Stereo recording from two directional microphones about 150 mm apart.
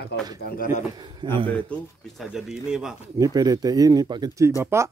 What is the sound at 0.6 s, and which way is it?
Speech, 55° left (ahead or behind).